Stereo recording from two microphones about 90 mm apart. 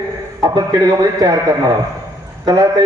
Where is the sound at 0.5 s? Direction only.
45° right (ahead or behind).